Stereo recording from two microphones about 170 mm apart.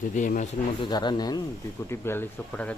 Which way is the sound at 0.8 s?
25° left (ahead or behind).